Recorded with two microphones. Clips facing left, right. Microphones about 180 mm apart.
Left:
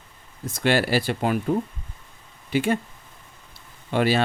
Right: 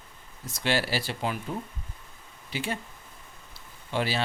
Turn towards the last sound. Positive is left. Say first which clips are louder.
# left 8 dB
turn(degrees=55)  # may be behind; listen again after turning